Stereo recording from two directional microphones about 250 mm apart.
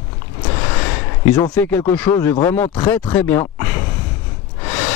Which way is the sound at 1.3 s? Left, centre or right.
Centre.